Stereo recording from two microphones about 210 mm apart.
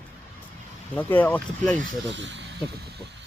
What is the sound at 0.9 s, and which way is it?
Speech, 10° left (ahead or behind).